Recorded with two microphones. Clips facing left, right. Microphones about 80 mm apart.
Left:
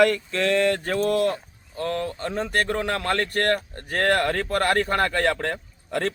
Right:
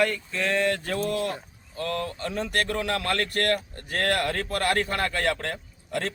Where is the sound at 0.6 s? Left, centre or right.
Left.